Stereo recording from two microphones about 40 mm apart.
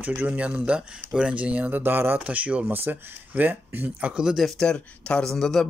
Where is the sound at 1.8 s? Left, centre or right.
Right.